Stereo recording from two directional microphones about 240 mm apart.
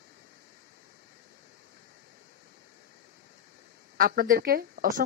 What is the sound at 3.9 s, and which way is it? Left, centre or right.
Speech, right.